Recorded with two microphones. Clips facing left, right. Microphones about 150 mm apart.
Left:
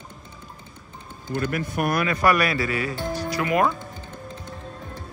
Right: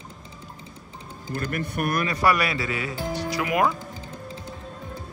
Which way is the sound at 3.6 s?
Centre (ahead or behind).